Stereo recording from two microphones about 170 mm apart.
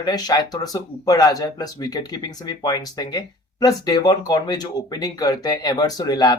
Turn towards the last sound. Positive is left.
turn(degrees=25)  # may be behind; listen again after turning